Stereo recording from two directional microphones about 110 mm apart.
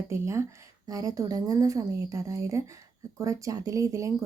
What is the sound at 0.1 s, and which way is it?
A woman's voice, 25° right (ahead or behind).